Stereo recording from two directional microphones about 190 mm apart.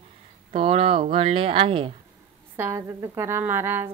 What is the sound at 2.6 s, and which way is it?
A woman's voice, 15° right (ahead or behind).